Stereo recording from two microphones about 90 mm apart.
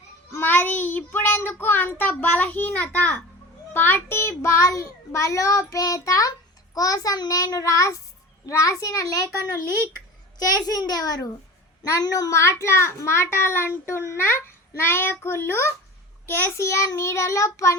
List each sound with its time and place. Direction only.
0.3 s child singing: 25° left (ahead or behind)
3.7 s a child's voice: 20° left (ahead or behind); by 12.3 s 45° left (ahead or behind)
12.3 s a child's voice: 30° left (ahead or behind)